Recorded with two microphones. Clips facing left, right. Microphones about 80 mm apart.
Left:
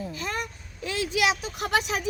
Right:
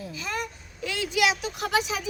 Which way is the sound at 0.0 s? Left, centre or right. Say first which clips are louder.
Left 1 dB; left.